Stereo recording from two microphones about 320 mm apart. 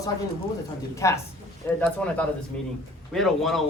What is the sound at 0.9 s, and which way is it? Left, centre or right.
A man's voice, centre.